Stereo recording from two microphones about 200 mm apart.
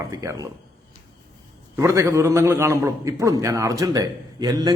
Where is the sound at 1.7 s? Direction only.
15° right (ahead or behind).